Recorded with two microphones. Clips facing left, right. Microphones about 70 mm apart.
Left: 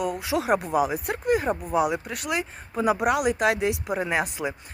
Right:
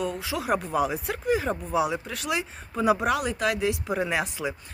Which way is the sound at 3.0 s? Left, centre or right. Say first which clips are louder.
Left 3 dB; centre.